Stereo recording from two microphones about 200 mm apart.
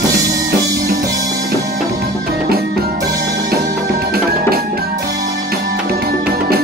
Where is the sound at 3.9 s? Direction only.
50° right (ahead or behind).